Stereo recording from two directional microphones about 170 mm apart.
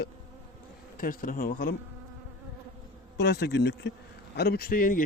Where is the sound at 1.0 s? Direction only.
55° left (ahead or behind).